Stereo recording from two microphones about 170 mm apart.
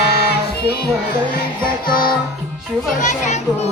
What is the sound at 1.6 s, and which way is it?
Music, 60° left (ahead or behind).